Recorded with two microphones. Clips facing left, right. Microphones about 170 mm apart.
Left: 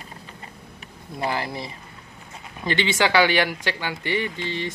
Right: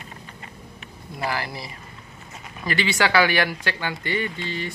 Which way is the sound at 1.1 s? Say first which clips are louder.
Left 2 dB; 25° left (ahead or behind).